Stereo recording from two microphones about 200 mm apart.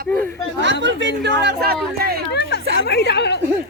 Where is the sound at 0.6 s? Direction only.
65° right (ahead or behind).